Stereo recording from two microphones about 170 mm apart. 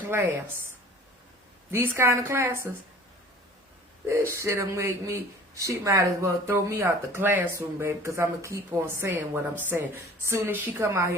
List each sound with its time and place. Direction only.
0.1 s speech: 15° right (ahead or behind)
1.7 s speech: 15° right (ahead or behind)
4.0 s speech: 15° right (ahead or behind)